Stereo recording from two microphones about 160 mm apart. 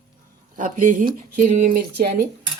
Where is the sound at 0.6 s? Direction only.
55° right (ahead or behind).